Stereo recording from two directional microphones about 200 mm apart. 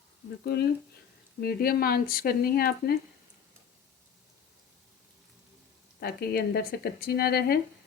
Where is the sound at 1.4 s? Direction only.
50° left (ahead or behind).